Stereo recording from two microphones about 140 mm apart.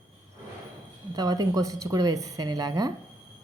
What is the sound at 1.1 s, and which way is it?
A woman's voice, 25° right (ahead or behind).